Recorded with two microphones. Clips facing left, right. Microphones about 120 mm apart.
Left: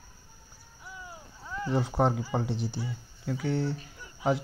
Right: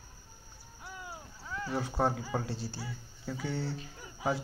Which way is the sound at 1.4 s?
20° left (ahead or behind).